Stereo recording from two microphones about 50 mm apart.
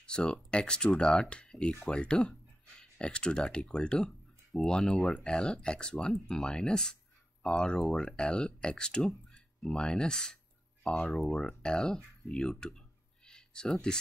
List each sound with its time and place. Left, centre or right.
0.0 s speech: centre
9.3 s a sound: centre
10.9 s speech: centre